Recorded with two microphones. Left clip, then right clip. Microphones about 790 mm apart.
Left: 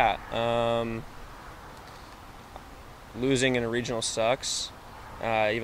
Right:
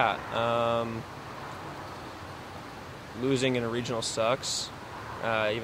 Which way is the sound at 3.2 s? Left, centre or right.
Left.